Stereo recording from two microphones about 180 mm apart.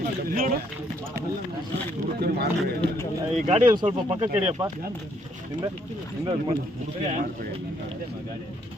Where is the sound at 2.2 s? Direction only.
60° right (ahead or behind).